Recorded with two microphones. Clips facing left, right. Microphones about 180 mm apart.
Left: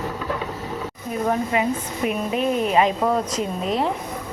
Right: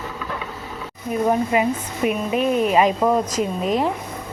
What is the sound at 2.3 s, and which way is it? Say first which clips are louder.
A woman's voice: right 2 dB; 5° right (ahead or behind).